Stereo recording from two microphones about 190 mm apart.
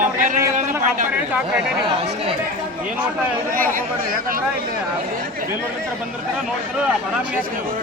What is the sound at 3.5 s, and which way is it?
Speech, 45° right (ahead or behind).